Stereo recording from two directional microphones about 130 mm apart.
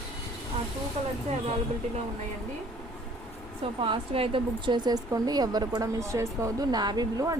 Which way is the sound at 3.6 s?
40° right (ahead or behind).